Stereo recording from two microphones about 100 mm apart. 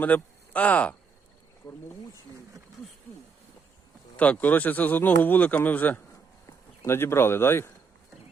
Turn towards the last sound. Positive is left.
turn(degrees=25)  # may be behind; listen again after turning